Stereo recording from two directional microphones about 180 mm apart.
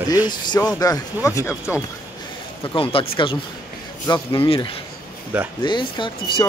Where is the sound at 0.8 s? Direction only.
20° left (ahead or behind).